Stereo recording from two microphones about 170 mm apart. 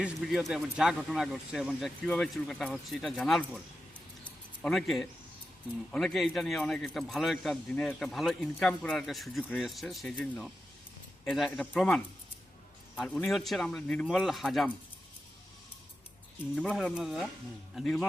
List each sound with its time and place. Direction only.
0.0 s a man's voice: centre (ahead or behind)
4.6 s a man's voice: centre (ahead or behind)
16.6 s a man's voice: centre (ahead or behind)